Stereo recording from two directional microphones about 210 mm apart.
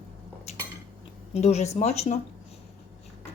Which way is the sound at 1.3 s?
30° left (ahead or behind).